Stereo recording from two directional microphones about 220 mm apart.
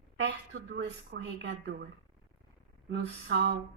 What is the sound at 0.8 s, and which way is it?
Speech, 55° right (ahead or behind).